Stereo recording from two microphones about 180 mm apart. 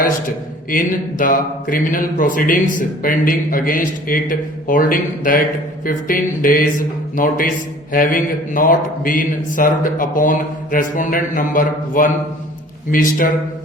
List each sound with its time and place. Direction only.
0.7 s speech: 50° left (ahead or behind)